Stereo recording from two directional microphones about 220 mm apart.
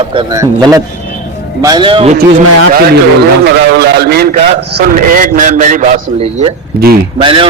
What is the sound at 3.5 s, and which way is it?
A man's voice, 50° right (ahead or behind).